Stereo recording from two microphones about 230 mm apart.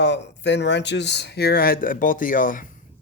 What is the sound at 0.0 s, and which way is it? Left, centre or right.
Speech, left.